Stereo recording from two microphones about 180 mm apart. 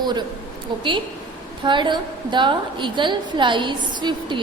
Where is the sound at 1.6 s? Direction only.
25° right (ahead or behind).